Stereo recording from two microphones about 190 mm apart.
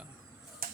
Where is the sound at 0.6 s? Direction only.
50° right (ahead or behind).